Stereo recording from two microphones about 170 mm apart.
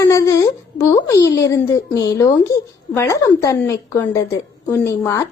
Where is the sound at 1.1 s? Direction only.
20° left (ahead or behind).